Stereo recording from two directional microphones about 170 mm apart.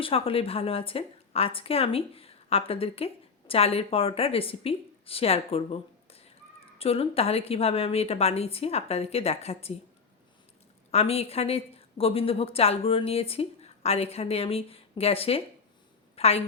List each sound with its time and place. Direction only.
0.0 s a woman's voice: 35° left (ahead or behind)
10.9 s a woman's voice: 35° left (ahead or behind)